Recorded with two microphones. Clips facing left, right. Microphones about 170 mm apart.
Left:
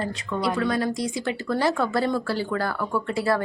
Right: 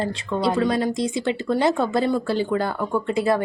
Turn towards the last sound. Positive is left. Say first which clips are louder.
# right 3 dB
turn(degrees=-20)  # may be behind; listen again after turning